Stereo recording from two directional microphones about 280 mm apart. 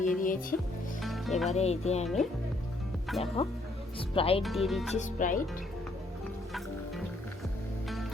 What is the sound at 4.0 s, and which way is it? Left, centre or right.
Speech, centre.